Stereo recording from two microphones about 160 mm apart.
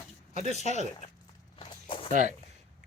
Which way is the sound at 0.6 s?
45° right (ahead or behind).